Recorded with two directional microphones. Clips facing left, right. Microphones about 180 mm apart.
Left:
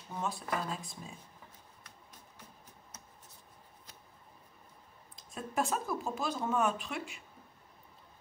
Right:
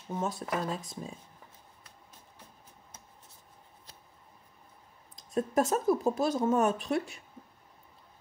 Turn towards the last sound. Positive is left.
turn(degrees=-40)  # may be behind; listen again after turning